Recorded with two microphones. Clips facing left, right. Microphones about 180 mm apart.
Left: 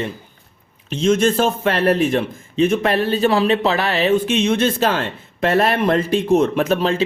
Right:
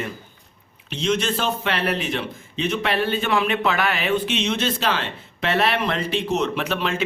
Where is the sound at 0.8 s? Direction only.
45° left (ahead or behind).